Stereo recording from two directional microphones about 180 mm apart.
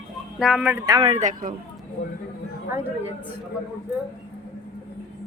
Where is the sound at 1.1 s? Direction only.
45° right (ahead or behind).